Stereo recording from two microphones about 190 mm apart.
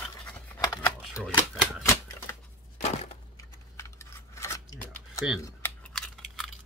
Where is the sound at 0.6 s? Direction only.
20° left (ahead or behind).